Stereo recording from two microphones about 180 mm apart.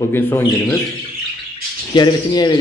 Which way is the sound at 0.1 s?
15° left (ahead or behind).